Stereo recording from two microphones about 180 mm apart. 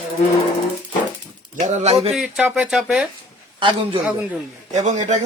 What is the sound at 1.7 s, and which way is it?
Speech, 35° right (ahead or behind).